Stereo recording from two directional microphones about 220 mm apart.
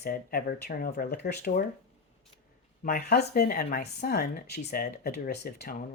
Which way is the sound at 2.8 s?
45° left (ahead or behind).